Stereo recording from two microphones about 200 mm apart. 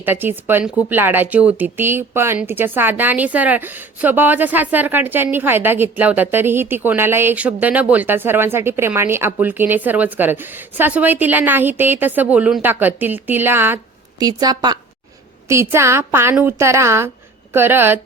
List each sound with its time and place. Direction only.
0.0 s a woman's voice: 10° right (ahead or behind)